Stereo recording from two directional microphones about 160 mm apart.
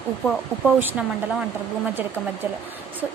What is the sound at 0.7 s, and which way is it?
Speech, 10° right (ahead or behind).